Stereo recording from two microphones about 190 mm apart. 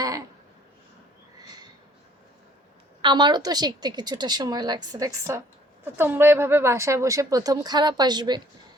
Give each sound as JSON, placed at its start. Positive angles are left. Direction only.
{"t": 3.0, "sound": "a woman's voice", "side_deg": -25}